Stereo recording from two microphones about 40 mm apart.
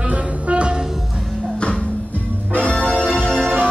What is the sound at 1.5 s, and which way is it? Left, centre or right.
Music, left.